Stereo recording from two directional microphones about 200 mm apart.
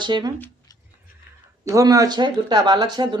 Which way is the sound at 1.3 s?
50° left (ahead or behind).